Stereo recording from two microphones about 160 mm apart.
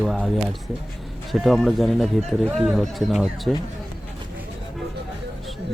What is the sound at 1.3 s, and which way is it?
Speech, centre (ahead or behind).